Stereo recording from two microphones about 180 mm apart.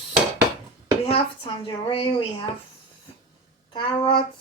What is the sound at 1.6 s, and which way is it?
Speech, 30° left (ahead or behind).